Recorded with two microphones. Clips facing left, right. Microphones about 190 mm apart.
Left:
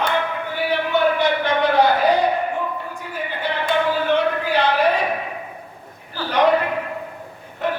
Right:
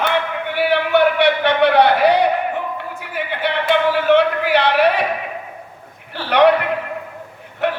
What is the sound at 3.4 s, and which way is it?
Speech, 70° right (ahead or behind).